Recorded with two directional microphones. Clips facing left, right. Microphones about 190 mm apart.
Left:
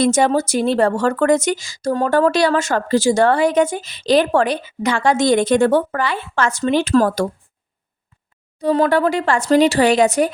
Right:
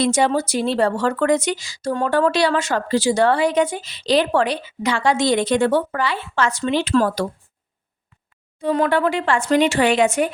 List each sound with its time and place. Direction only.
0.0 s a woman's voice: 45° left (ahead or behind)
8.5 s speech: 35° left (ahead or behind)